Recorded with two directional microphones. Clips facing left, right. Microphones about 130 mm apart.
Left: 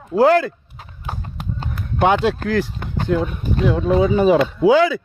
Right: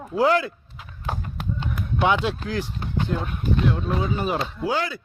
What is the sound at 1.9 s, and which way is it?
Speech, 45° left (ahead or behind).